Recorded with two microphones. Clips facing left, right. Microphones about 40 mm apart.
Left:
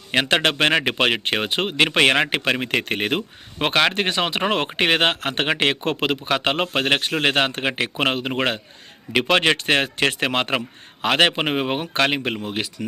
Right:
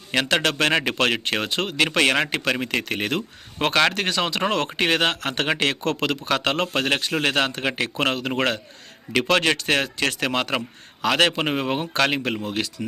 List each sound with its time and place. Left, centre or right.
0.1 s speech: left
3.6 s speech: centre